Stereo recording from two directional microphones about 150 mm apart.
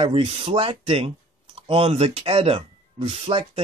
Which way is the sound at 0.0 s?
40° right (ahead or behind).